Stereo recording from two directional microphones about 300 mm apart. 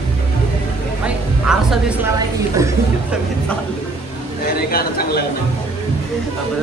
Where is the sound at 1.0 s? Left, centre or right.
Centre.